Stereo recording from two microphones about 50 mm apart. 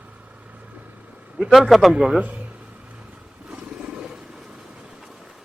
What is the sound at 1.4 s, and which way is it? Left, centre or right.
Speech, centre.